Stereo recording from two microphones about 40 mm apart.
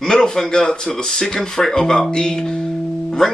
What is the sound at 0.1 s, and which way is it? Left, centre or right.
Speech, centre.